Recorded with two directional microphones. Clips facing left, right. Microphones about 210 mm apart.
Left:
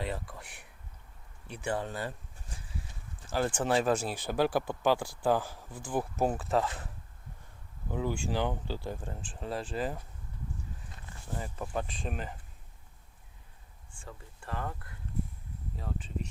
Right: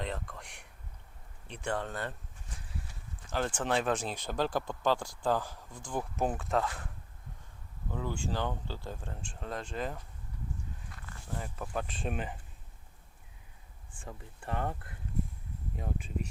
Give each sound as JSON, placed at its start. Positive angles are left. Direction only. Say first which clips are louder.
{"t": 0.0, "sound": "a sound", "louder": "left 1 dB", "side_deg": 5}
{"t": 1.5, "sound": "speech", "louder": "left 1 dB", "side_deg": 5}
{"t": 3.2, "sound": "speech", "louder": "left 3 dB", "side_deg": 10}
{"t": 7.9, "sound": "speech", "louder": "left 3 dB", "side_deg": 15}
{"t": 11.3, "sound": "speech", "louder": "left 2 dB", "side_deg": 5}
{"t": 14.0, "sound": "speech", "louder": "right 2 dB", "side_deg": -25}
{"t": 15.7, "sound": "speech", "louder": "right 1 dB", "side_deg": -15}